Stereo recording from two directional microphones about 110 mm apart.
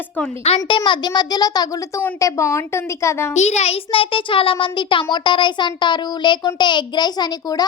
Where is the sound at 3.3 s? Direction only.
90° left; by 7.7 s 40° left (ahead or behind).